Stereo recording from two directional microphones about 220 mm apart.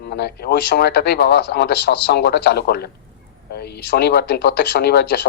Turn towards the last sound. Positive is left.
turn(degrees=45)  # may be behind; listen again after turning